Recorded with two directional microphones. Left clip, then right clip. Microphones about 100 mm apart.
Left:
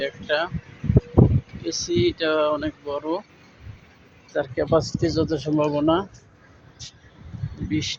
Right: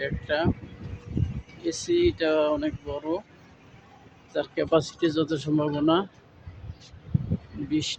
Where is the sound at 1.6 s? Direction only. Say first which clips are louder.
Left 1 dB; 30° right (ahead or behind).